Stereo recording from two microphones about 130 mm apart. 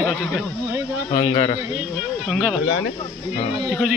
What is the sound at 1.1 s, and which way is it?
Speech, 45° left (ahead or behind).